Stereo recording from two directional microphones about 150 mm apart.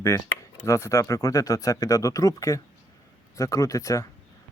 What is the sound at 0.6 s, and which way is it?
Speech, 20° left (ahead or behind).